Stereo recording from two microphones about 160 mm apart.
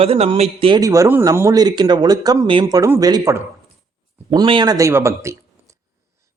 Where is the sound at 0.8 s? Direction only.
20° right (ahead or behind).